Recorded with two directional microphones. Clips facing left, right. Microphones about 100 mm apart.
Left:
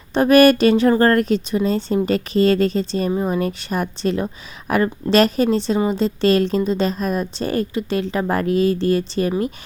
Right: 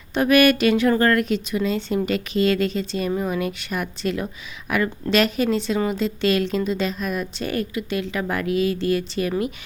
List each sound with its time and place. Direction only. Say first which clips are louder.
0.1 s a woman's voice: left 5 dB; 35° left (ahead or behind)